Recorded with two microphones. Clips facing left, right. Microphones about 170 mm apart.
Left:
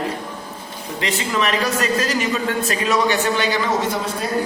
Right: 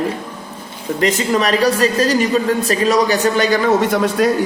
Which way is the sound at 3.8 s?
70° right (ahead or behind).